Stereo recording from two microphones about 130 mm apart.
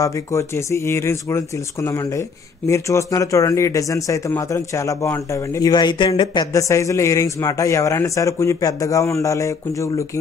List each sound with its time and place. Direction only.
0.0 s speech: 20° left (ahead or behind)